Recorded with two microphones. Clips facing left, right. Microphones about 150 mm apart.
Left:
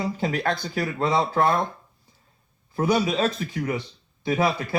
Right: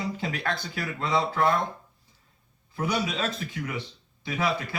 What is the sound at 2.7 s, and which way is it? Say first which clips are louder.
Speech: left 6 dB; 40° left (ahead or behind).